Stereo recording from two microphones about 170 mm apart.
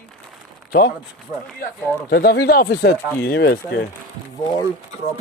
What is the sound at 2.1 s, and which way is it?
Speech, 70° left (ahead or behind).